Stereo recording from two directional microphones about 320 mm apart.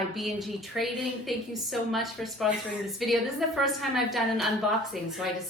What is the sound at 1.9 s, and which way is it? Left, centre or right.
A woman's voice, centre.